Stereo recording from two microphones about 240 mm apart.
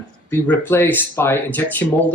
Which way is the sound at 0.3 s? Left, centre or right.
Centre.